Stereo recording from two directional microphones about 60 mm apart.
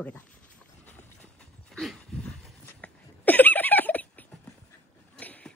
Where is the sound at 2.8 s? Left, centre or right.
Left.